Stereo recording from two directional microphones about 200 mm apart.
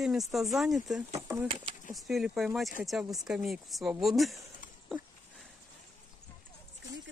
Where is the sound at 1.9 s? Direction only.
Centre (ahead or behind).